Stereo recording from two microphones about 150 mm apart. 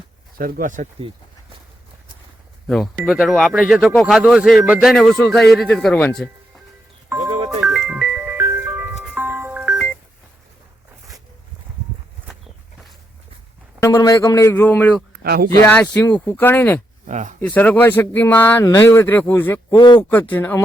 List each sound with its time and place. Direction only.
0.3 s speech: 80° right; by 0.9 s 60° right (ahead or behind)
2.6 s speech: centre (ahead or behind)
7.6 s music: centre (ahead or behind)
13.7 s speech: 20° left (ahead or behind)
15.1 s speech: 90° right
15.6 s speech: 10° left (ahead or behind)
17.1 s speech: 50° right (ahead or behind)
17.4 s speech: 10° left (ahead or behind)